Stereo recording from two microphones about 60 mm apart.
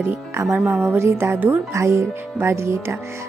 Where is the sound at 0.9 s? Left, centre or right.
Right.